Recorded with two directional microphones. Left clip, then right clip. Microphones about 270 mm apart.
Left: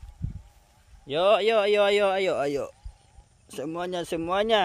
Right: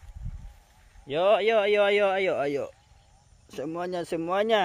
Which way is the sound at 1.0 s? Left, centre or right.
Centre.